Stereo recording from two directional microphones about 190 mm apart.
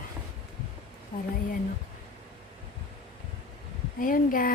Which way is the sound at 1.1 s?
50° left (ahead or behind).